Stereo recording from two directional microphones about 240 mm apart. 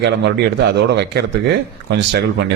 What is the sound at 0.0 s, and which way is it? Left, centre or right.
A man's voice, right.